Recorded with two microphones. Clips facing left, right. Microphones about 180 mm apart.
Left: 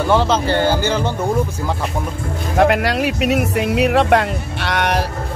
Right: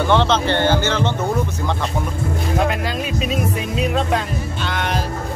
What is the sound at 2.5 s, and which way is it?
Speech, 70° left (ahead or behind).